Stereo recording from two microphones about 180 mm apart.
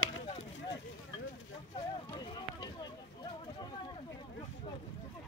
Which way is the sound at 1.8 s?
25° left (ahead or behind).